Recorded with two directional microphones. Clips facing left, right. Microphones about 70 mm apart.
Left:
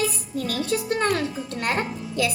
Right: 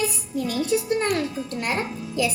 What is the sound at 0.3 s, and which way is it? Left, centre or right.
Speech, left.